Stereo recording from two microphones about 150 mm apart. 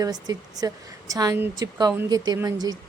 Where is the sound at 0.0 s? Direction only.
25° right (ahead or behind).